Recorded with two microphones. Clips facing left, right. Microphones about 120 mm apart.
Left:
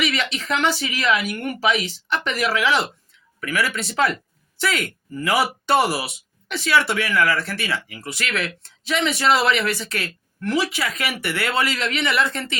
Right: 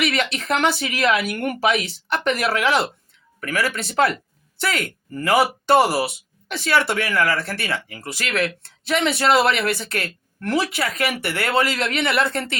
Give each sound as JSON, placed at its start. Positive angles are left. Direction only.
{"t": 0.0, "sound": "speech", "side_deg": -50}
{"t": 8.9, "sound": "speech", "side_deg": -55}
{"t": 11.1, "sound": "speech", "side_deg": -30}
{"t": 11.3, "sound": "speech", "side_deg": -50}